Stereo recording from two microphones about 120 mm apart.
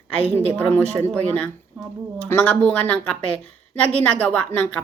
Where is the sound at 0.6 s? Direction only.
15° left (ahead or behind).